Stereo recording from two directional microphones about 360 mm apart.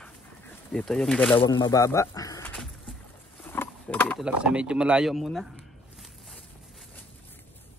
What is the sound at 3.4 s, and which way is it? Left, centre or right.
Mechanisms, centre.